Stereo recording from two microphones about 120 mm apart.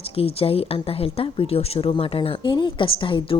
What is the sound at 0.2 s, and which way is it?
Speech, 55° left (ahead or behind).